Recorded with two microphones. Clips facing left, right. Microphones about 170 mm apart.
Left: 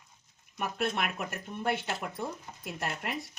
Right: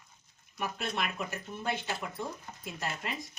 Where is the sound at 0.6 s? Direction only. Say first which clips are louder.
Left 3 dB; 55° left (ahead or behind).